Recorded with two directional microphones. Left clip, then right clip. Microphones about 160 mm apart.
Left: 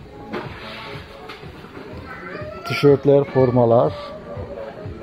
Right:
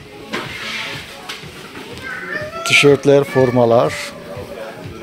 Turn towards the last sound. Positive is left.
turn(degrees=10)  # may be behind; listen again after turning